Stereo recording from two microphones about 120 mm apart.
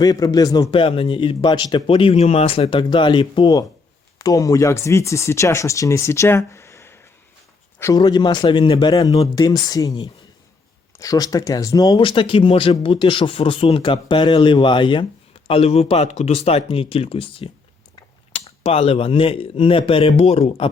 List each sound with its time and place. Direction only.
0.0 s speech: 30° left (ahead or behind)
1.9 s speech: 50° left (ahead or behind)
4.2 s speech: 30° left (ahead or behind)
7.9 s speech: 35° left (ahead or behind)
8.9 s speech: 30° left (ahead or behind); by 20.7 s 60° left (ahead or behind)